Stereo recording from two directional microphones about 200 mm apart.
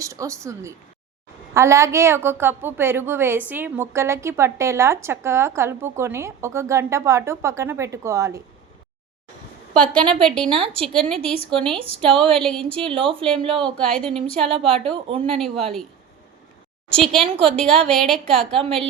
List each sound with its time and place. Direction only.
0.0 s a woman's voice: 15° right (ahead or behind)
10.2 s a woman's voice: 5° left (ahead or behind)
10.5 s speech: 25° right (ahead or behind)
10.8 s a woman's voice: 5° left (ahead or behind)
12.6 s speech: 25° right (ahead or behind)
13.7 s a woman's voice: 5° left (ahead or behind)
14.9 s speech: 25° right (ahead or behind)
15.4 s a woman's voice: centre (ahead or behind)
17.0 s a woman's voice: centre (ahead or behind)
17.2 s speech: 30° right (ahead or behind)
17.6 s a woman's voice: 5° left (ahead or behind)